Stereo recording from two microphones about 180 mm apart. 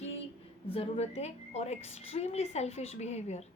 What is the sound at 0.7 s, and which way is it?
A woman's voice, 35° left (ahead or behind).